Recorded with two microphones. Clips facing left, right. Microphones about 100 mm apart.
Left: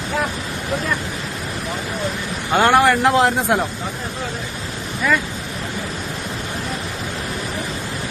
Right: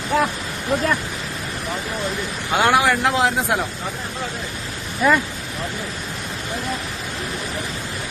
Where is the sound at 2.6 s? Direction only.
Centre (ahead or behind).